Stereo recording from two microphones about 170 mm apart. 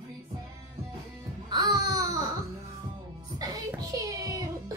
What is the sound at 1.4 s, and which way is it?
Music, 25° right (ahead or behind).